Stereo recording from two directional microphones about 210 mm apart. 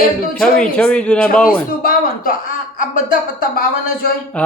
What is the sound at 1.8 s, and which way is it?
Speech, 45° left (ahead or behind).